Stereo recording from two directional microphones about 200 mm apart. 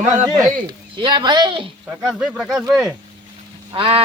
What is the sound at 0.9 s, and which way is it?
Speech, 25° right (ahead or behind).